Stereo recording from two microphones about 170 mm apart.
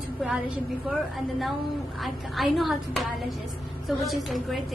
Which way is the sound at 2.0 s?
Centre (ahead or behind).